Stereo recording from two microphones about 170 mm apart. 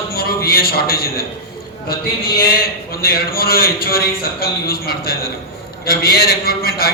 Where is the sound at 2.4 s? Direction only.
60° left (ahead or behind).